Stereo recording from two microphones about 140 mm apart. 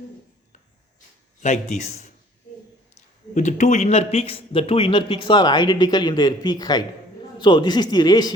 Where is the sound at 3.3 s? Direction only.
60° left (ahead or behind); by 8.3 s 30° left (ahead or behind).